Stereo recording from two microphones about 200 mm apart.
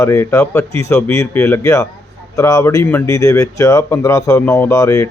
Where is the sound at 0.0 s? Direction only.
15° left (ahead or behind).